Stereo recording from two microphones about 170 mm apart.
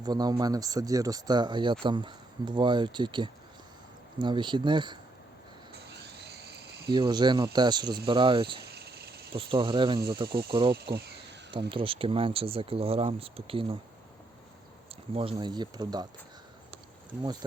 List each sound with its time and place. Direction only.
0.0 s speech: 25° right (ahead or behind)
5.9 s a sound: 80° right
6.9 s speech: 25° right (ahead or behind)
8.6 s cricket: 75° right (ahead or behind)
9.3 s speech: 30° right (ahead or behind)
10.7 s speech: 75° right (ahead or behind)
11.7 s speech: 30° right (ahead or behind)
15.1 s speech: 30° right (ahead or behind)